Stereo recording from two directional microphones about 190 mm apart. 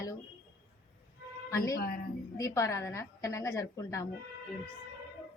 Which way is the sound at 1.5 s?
15° left (ahead or behind).